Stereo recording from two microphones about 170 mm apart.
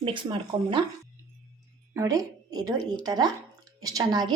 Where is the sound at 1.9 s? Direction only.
20° right (ahead or behind).